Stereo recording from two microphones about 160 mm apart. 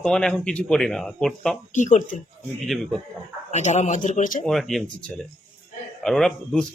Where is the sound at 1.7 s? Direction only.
50° left (ahead or behind).